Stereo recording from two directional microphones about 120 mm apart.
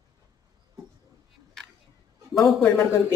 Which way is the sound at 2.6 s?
20° left (ahead or behind).